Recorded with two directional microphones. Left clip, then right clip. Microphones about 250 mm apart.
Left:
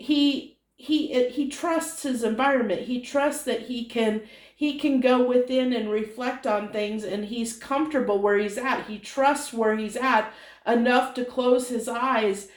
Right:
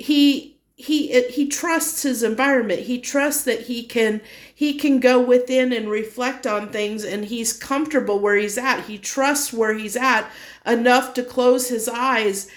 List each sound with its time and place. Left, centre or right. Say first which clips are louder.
0.0 s speech: right 6 dB; right